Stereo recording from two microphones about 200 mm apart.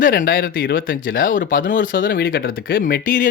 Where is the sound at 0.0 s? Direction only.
45° left (ahead or behind).